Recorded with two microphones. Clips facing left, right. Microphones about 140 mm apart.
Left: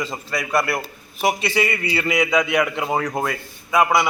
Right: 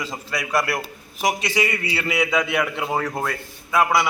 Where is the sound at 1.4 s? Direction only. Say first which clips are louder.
Left 2 dB; 10° right (ahead or behind).